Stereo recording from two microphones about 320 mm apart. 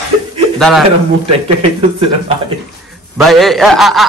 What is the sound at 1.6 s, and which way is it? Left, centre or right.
Speech, centre.